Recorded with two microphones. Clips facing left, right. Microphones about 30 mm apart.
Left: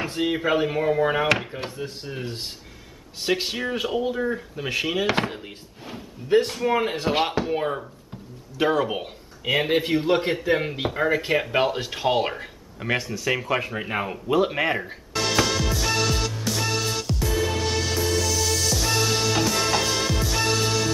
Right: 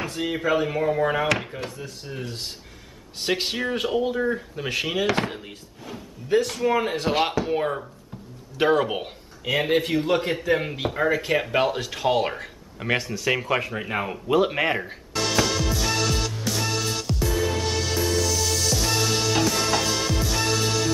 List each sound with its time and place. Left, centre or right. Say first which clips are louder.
0.0 s a sound: left 3 dB; left
0.3 s speech: even; centre
1.6 s speech: left 2 dB; left
3.2 s speech: even; centre
5.9 s speech: left 2 dB; left
6.5 s speech: even; centre
8.5 s speech: right 1 dB; centre
9.4 s speech: even; centre
11.3 s speech: even; centre
11.8 s speech: even; centre
12.7 s speech: right 1 dB; centre
13.6 s music: even; centre